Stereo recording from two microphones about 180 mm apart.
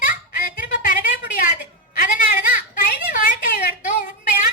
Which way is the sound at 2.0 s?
50° left (ahead or behind).